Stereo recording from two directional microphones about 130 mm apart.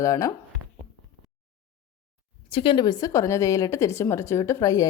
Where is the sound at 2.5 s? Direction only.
40° left (ahead or behind).